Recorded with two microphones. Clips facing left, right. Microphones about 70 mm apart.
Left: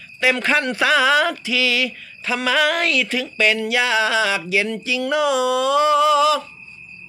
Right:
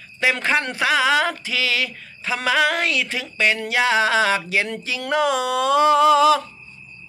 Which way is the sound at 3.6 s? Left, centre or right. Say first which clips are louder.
Even; right.